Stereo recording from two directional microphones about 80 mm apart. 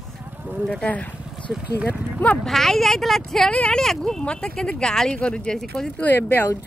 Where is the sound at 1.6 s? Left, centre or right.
Centre.